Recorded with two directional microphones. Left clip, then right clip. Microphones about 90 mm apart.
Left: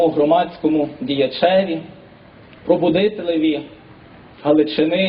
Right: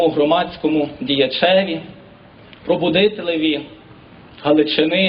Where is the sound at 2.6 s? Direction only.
30° right (ahead or behind).